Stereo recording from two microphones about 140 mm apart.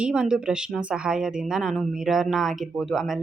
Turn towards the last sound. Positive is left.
turn(degrees=0)  # may be behind; listen again after turning